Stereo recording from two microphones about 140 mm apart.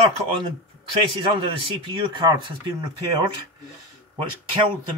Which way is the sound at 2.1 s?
35° right (ahead or behind).